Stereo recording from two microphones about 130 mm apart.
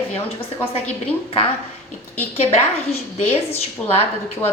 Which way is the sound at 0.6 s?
10° left (ahead or behind).